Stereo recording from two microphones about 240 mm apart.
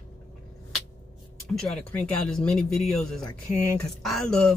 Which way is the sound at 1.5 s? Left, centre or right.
Centre.